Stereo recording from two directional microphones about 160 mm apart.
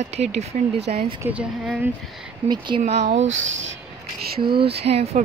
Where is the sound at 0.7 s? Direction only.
90° right.